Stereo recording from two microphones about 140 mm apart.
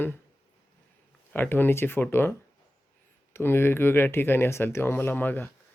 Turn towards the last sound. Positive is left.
turn(degrees=15)  # may be behind; listen again after turning